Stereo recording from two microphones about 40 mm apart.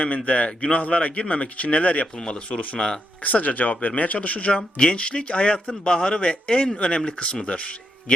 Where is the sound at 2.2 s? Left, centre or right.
Left.